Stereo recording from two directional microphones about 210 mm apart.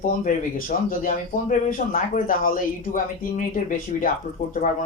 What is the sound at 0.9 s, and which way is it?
Speech, 40° left (ahead or behind).